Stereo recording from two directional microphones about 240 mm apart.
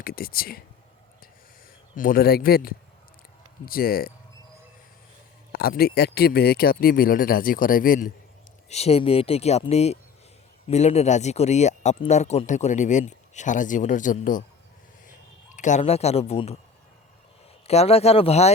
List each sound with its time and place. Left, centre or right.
0.0 s speech: left
2.0 s speech: left
5.5 s speech: left
15.5 s speech: left
17.7 s speech: left